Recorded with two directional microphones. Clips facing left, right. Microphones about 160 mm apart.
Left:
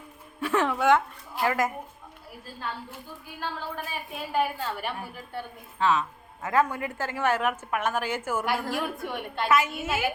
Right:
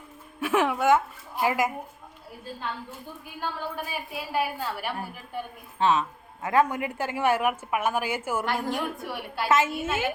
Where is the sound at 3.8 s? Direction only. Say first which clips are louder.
Right 1 dB; 5° right (ahead or behind).